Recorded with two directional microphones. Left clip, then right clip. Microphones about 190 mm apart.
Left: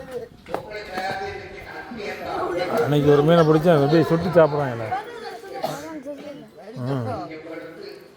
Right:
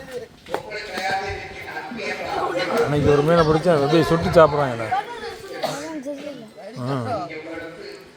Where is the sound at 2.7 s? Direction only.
20° left (ahead or behind).